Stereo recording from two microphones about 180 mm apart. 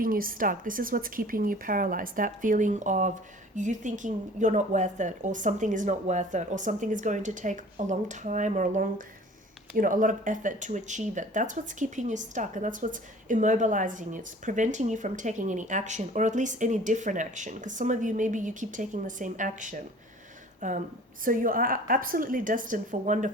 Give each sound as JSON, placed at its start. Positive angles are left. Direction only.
{"t": 0.0, "sound": "speech", "side_deg": -50}